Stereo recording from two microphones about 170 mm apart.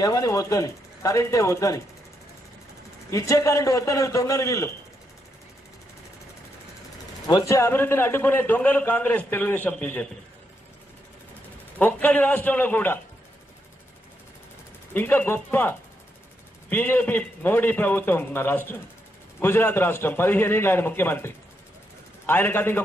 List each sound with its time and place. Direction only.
0.0 s speech: 20° left (ahead or behind)
3.1 s speech: 20° left (ahead or behind)
7.2 s a man's voice: 20° left (ahead or behind)
11.8 s a man's voice: 10° left (ahead or behind)
15.0 s a man's voice: 10° left (ahead or behind)